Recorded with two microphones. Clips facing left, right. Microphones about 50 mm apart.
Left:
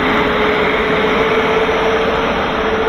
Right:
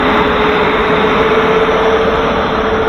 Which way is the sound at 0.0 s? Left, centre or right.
Right.